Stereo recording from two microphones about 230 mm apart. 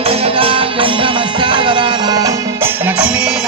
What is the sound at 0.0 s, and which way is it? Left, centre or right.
Music, right.